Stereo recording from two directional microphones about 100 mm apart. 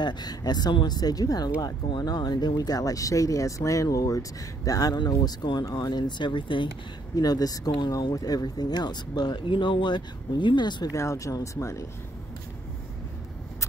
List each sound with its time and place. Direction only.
0.0 s speech: 45° left (ahead or behind)
7.2 s speech: 40° left (ahead or behind)
10.9 s speech: 30° left (ahead or behind)